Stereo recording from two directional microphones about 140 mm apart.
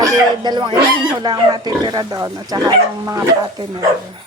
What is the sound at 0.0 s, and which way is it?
Speech, 30° right (ahead or behind).